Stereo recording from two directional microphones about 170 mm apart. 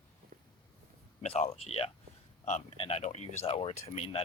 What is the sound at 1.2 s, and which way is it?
Speech, 40° left (ahead or behind).